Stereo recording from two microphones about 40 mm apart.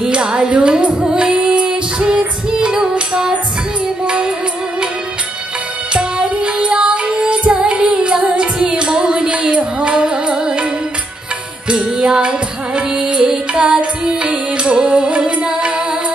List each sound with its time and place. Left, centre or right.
0.1 s music: right
5.9 s music: right
9.9 s music: centre
11.7 s music: right